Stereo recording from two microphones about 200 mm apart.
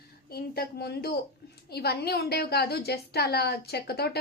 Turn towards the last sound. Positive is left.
turn(degrees=55)  # may be behind; listen again after turning